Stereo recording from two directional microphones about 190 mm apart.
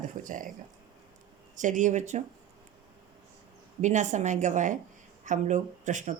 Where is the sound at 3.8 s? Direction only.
40° right (ahead or behind).